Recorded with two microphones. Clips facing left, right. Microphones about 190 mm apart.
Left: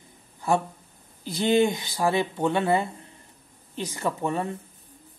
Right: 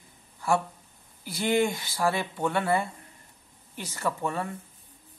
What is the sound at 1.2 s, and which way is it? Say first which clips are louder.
Speech: left 4 dB; 20° left (ahead or behind).